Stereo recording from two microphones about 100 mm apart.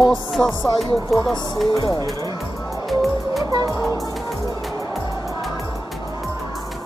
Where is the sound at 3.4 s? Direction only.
35° right (ahead or behind).